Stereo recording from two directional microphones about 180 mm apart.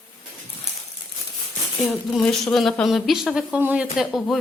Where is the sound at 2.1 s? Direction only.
5° left (ahead or behind).